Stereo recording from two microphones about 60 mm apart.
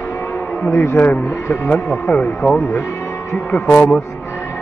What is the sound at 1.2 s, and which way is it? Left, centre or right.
Speech, left.